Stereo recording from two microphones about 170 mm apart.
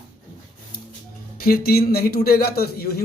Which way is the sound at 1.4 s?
65° left (ahead or behind).